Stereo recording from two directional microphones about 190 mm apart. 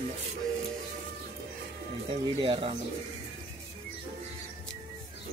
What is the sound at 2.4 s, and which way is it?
Speech, 30° right (ahead or behind).